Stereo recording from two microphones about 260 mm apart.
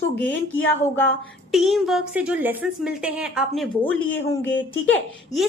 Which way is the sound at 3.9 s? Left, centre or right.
Left.